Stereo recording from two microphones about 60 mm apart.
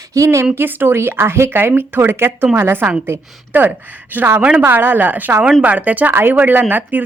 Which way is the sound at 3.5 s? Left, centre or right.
Right.